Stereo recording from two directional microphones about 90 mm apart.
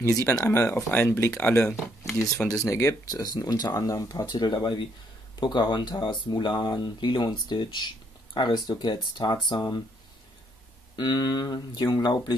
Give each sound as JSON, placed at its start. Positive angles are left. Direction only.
{"t": 0.2, "sound": "speech", "side_deg": 30}
{"t": 1.6, "sound": "speech", "side_deg": 5}
{"t": 2.5, "sound": "speech", "side_deg": 35}
{"t": 3.1, "sound": "speech", "side_deg": 45}
{"t": 11.0, "sound": "speech", "side_deg": 55}